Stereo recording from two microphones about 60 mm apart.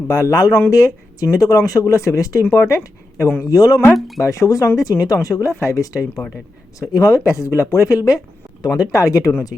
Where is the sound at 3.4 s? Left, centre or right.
Left.